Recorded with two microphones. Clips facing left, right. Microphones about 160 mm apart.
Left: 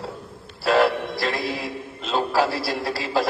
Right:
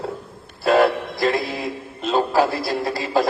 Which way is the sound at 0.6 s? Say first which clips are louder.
Right 3 dB; 50° right (ahead or behind).